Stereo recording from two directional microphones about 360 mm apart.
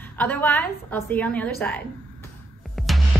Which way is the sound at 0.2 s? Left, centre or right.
Centre.